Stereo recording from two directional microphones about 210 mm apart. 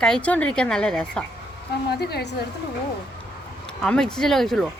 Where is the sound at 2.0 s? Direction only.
50° left (ahead or behind).